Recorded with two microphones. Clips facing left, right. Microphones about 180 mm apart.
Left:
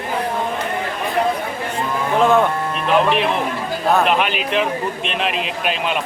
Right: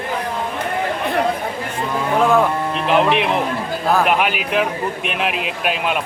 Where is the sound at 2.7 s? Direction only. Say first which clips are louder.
Right 1 dB; 20° right (ahead or behind).